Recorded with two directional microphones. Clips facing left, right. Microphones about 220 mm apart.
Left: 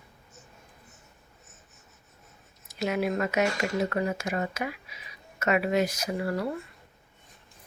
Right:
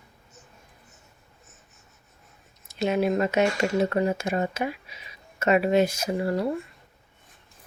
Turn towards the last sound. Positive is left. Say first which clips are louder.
# right 4 dB
turn(degrees=-25)  # may be behind; listen again after turning